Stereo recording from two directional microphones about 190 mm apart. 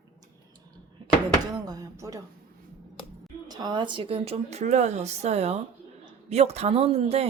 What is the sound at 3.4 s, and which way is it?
A woman's voice, 20° right (ahead or behind).